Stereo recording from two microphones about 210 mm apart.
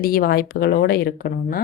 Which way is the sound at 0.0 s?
45° left (ahead or behind).